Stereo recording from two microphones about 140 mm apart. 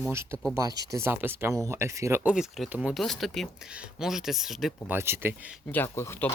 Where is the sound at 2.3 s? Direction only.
5° right (ahead or behind).